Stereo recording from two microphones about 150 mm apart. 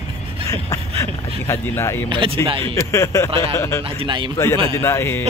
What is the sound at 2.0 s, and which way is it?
Speech, 35° right (ahead or behind).